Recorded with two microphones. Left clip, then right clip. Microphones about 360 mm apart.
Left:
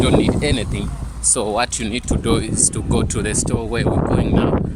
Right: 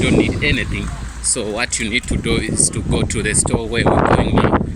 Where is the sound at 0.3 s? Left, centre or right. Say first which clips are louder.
Right 2 dB; centre.